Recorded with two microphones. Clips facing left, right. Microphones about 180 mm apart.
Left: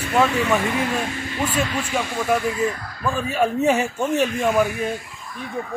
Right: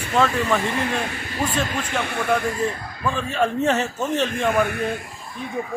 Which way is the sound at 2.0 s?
60° right (ahead or behind).